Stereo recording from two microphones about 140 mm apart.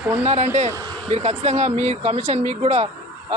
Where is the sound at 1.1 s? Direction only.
50° right (ahead or behind).